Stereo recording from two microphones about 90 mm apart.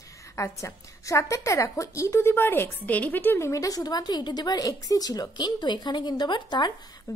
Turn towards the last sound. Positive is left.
turn(degrees=55)  # may be behind; listen again after turning